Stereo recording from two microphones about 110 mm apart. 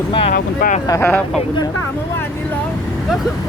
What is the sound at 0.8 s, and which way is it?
Speech, 30° left (ahead or behind).